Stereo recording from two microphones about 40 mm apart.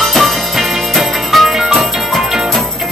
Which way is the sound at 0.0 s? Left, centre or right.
Centre.